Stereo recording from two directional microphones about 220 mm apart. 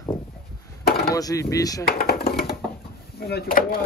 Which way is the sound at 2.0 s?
45° left (ahead or behind).